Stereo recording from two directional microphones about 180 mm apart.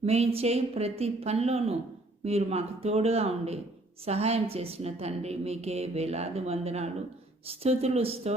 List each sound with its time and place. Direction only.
0.0 s a woman's voice: 35° right (ahead or behind)